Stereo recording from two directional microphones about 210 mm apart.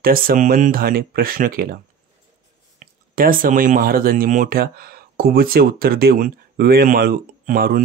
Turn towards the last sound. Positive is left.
turn(degrees=-45)  # may be behind; listen again after turning